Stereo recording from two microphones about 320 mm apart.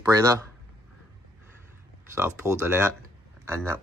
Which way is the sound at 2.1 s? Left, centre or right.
Centre.